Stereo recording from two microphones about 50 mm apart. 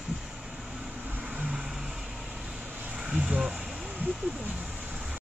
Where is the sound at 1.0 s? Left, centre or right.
Right.